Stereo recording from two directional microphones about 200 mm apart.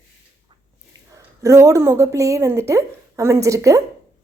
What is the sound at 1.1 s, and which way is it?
A woman's voice, 15° right (ahead or behind).